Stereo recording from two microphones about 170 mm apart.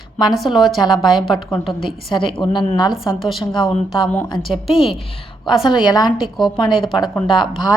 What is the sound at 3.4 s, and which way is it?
Speech, 25° left (ahead or behind).